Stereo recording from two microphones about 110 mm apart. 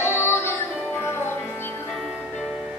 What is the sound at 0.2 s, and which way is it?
Music, 20° left (ahead or behind).